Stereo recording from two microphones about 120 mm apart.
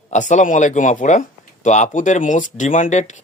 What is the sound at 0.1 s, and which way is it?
Speech, 90° left.